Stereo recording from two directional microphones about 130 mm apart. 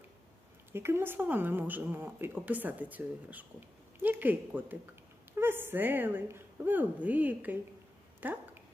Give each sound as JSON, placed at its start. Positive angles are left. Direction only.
{"t": 0.7, "sound": "speech", "side_deg": -20}